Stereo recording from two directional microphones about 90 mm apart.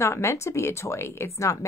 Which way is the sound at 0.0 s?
30° left (ahead or behind).